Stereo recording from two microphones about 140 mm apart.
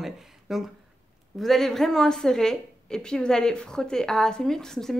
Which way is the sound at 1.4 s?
Centre (ahead or behind).